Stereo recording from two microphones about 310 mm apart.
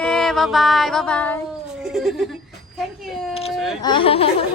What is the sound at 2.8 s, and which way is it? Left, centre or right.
Speech, centre.